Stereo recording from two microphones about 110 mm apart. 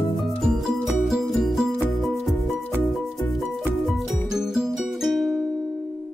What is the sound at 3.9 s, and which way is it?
Music, 5° right (ahead or behind).